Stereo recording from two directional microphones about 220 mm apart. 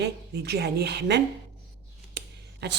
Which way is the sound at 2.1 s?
50° right (ahead or behind).